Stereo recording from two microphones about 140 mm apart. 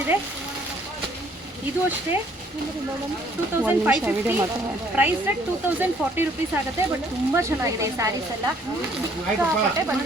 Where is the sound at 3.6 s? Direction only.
10° right (ahead or behind).